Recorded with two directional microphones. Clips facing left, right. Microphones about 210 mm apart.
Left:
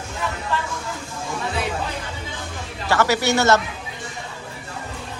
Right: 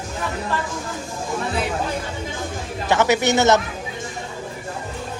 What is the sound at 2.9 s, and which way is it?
Speech, 20° right (ahead or behind).